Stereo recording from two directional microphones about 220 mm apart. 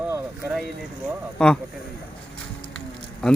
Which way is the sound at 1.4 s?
5° left (ahead or behind).